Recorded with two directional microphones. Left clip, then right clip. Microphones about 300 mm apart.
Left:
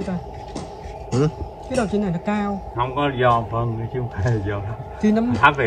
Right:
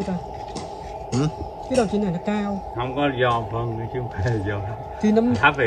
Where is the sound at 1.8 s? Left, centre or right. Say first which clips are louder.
Right 1 dB; left.